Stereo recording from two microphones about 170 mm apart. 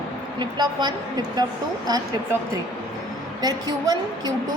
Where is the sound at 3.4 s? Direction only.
25° right (ahead or behind).